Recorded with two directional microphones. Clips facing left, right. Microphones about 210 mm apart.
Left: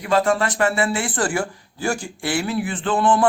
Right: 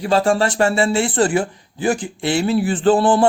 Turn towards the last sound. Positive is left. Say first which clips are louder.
# right 5 dB
turn(degrees=-30)  # may be behind; listen again after turning